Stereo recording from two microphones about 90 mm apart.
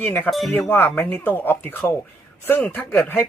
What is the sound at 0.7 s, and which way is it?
Speech, 20° left (ahead or behind).